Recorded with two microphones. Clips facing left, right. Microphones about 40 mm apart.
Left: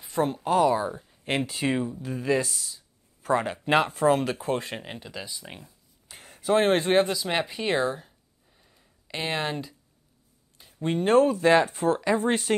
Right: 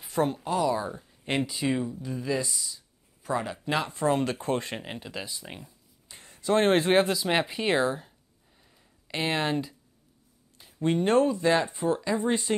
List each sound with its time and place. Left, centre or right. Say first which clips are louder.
0.0 s a sound: even; centre
0.5 s speech: left 9 dB; left
0.7 s speech: left 3 dB; centre
1.4 s speech: even; left
1.8 s speech: left 2 dB; centre
2.0 s speech: left 7 dB; left
4.1 s speech: left 2 dB; centre
6.0 s a sound: left 2 dB; left
6.6 s speech: right 1 dB; centre
10.6 s a sound: right 1 dB; centre
11.1 s speech: left 4 dB; left
11.6 s speech: left 3 dB; left